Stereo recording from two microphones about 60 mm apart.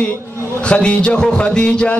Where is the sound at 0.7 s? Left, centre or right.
Centre.